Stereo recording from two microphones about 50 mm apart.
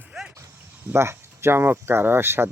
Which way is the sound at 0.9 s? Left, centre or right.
Right.